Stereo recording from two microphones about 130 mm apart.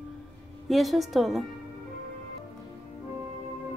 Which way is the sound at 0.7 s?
Centre (ahead or behind).